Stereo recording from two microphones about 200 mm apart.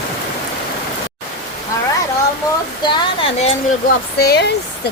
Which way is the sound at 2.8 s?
25° left (ahead or behind).